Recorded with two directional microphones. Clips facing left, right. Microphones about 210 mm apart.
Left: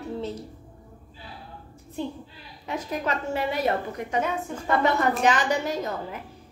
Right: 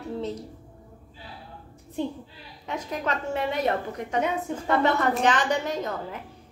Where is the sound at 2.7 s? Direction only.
5° left (ahead or behind).